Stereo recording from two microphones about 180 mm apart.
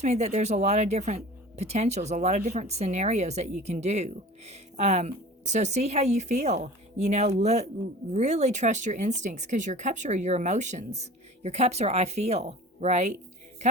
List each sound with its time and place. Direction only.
0.0 s speech: 40° right (ahead or behind)